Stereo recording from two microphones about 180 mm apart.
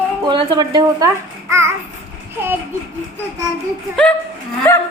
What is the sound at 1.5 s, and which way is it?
Babbling, 15° right (ahead or behind).